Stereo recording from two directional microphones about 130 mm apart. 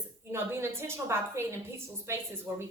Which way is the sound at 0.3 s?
20° right (ahead or behind).